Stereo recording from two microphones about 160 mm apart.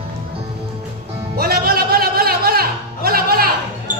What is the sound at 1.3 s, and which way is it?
Music, 75° right (ahead or behind).